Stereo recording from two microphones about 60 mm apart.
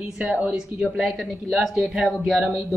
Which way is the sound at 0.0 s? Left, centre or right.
Centre.